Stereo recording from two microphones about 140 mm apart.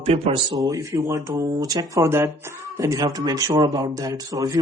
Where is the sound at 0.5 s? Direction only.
25° right (ahead or behind).